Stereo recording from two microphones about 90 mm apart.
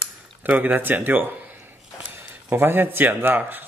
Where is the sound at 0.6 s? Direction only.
20° right (ahead or behind).